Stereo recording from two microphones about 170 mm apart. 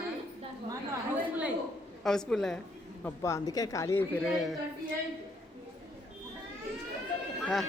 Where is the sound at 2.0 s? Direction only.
5° left (ahead or behind).